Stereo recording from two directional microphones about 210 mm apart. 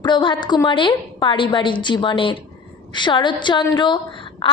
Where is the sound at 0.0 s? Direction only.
20° left (ahead or behind).